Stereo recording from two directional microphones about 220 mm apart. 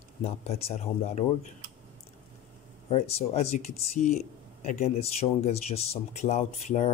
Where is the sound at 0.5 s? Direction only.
25° left (ahead or behind).